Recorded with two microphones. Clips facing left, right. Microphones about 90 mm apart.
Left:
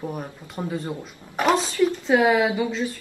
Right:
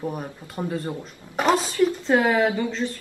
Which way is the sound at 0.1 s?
Centre (ahead or behind).